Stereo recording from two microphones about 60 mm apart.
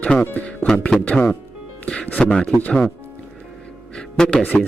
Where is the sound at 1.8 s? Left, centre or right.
Centre.